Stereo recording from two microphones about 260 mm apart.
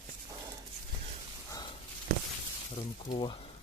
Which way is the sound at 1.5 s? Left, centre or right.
Centre.